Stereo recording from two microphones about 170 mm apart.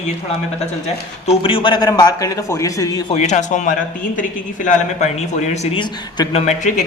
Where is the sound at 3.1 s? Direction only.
40° left (ahead or behind).